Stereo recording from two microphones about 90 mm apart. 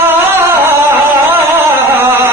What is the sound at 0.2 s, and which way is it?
Music, 30° right (ahead or behind).